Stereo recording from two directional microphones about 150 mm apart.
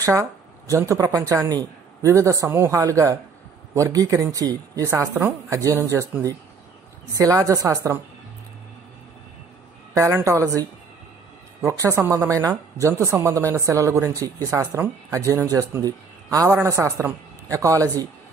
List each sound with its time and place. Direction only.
0.0 s a woman's voice: 20° right (ahead or behind)
9.9 s a woman's voice: 20° right (ahead or behind)